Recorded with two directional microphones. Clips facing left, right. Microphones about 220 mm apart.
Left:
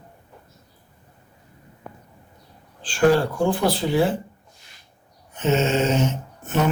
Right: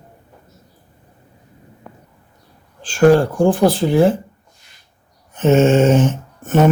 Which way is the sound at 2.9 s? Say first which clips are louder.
Right 6 dB; 45° right (ahead or behind).